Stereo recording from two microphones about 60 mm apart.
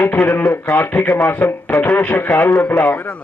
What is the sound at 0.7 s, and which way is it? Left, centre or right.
A man's voice, left.